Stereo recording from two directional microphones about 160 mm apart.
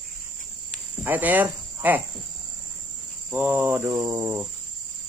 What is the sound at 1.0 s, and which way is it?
Speech, 10° right (ahead or behind).